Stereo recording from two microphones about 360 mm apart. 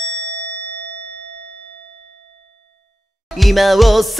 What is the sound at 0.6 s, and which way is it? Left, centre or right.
Ding, left.